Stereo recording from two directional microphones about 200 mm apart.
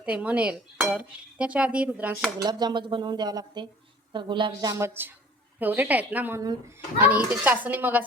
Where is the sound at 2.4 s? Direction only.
20° right (ahead or behind).